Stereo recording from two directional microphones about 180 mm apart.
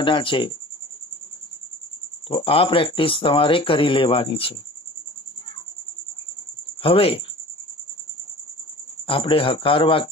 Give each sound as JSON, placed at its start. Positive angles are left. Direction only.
{"t": 0.0, "sound": "speech", "side_deg": 30}
{"t": 2.2, "sound": "speech", "side_deg": 30}
{"t": 6.8, "sound": "speech", "side_deg": 30}
{"t": 9.0, "sound": "speech", "side_deg": 30}